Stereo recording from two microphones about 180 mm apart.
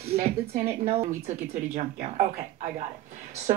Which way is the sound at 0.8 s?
35° right (ahead or behind).